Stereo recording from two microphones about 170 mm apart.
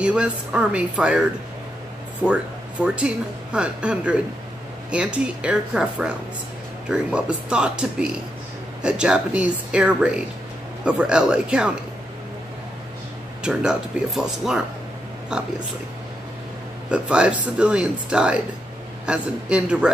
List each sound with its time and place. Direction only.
0.0 s speech: 5° right (ahead or behind)
2.2 s speech: 5° right (ahead or behind)
13.4 s speech: 5° right (ahead or behind)
16.9 s speech: 5° right (ahead or behind)